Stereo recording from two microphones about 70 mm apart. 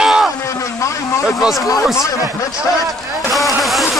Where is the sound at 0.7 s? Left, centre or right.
Left.